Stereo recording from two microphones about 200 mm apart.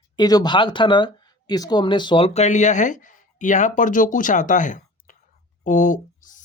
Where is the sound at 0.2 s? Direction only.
20° left (ahead or behind).